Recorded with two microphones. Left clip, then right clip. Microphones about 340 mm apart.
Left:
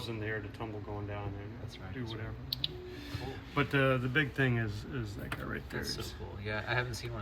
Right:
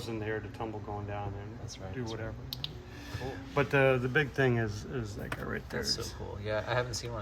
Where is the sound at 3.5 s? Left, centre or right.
Right.